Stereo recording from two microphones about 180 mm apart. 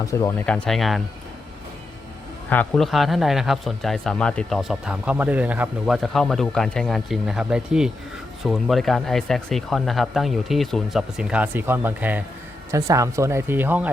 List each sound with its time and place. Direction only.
0.0 s speech: 20° left (ahead or behind)
0.4 s speech: 5° left (ahead or behind)
2.5 s speech: 5° left (ahead or behind); by 13.9 s 10° right (ahead or behind)